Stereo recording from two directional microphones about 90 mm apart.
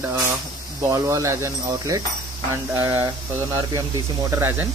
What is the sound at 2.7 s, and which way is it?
Speech, 25° right (ahead or behind).